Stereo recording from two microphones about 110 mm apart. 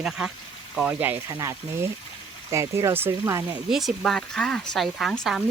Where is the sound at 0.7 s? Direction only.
5° right (ahead or behind).